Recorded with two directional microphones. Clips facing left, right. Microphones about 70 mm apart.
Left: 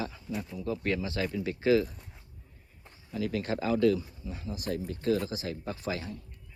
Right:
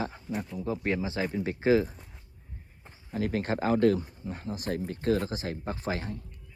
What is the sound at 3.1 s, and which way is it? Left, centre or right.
Speech, right.